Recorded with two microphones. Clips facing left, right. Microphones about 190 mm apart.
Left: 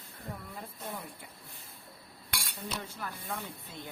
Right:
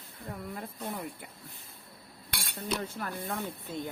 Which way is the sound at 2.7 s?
55° right (ahead or behind).